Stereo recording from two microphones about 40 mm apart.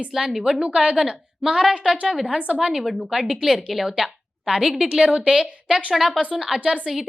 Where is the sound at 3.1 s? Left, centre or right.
Centre.